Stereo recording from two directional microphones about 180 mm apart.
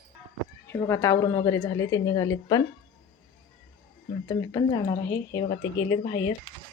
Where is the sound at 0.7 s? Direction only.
15° left (ahead or behind).